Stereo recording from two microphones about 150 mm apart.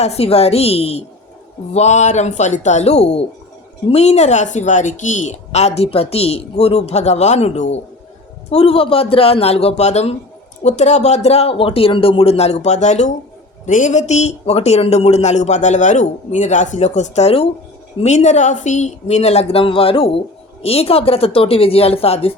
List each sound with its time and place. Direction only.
0.0 s a woman's voice: 45° left (ahead or behind)